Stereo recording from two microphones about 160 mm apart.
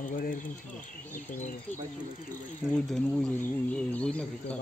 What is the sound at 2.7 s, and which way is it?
Speech, 5° left (ahead or behind).